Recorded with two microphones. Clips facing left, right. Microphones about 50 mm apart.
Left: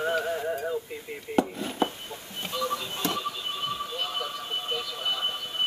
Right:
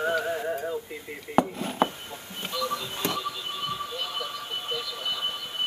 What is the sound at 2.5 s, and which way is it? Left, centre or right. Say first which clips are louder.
Music: even; left.